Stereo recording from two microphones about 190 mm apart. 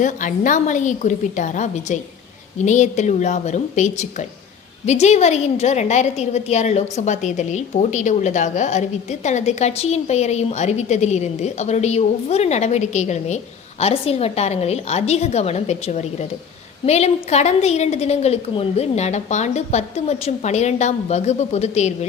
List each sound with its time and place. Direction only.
0.0 s a woman's voice: 40° left (ahead or behind)